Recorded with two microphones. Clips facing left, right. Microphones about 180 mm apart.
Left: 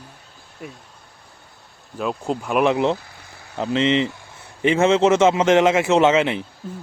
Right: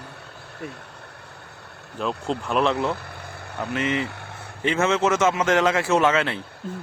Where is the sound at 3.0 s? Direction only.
60° right (ahead or behind).